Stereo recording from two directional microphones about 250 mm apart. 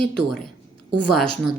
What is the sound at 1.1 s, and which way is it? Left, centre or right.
Speech, centre.